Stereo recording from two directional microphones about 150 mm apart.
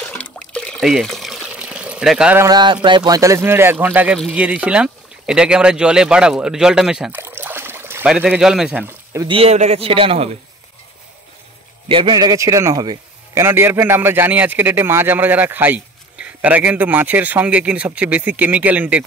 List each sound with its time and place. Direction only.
0.0 s water: 10° left (ahead or behind)
2.3 s a man's voice: 25° right (ahead or behind)
3.2 s a man's voice: 20° right (ahead or behind)
7.2 s trickle: 15° right (ahead or behind)
8.1 s a man's voice: 5° right (ahead or behind)
9.3 s a man's voice: 45° right (ahead or behind)
11.9 s a man's voice: 30° right (ahead or behind)
13.3 s a man's voice: 15° right (ahead or behind)